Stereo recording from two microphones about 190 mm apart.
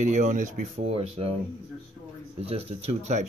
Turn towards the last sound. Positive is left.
turn(degrees=-35)  # may be behind; listen again after turning